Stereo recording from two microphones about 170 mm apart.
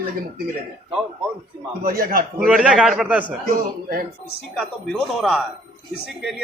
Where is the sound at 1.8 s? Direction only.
60° right (ahead or behind).